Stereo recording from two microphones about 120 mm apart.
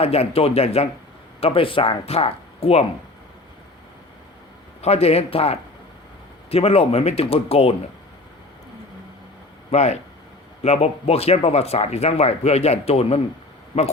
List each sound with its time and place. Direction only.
0.0 s speech: 55° left (ahead or behind)
4.8 s speech: 60° left (ahead or behind)
9.7 s speech: 65° left (ahead or behind)